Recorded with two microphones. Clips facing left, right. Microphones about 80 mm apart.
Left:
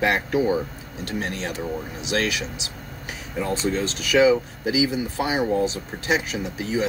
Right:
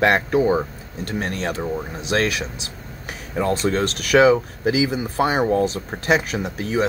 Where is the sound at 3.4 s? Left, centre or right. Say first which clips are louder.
Right 4 dB; right.